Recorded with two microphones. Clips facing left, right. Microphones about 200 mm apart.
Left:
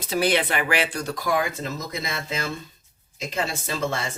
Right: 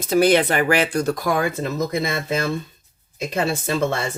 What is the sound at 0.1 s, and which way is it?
Speech, 45° right (ahead or behind).